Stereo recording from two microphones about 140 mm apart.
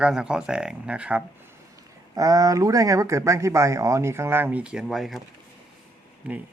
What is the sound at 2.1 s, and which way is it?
Speech, 25° right (ahead or behind).